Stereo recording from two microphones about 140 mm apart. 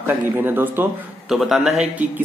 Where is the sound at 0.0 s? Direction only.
15° right (ahead or behind).